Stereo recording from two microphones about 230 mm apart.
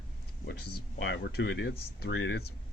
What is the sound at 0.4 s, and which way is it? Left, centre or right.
A man's voice, left.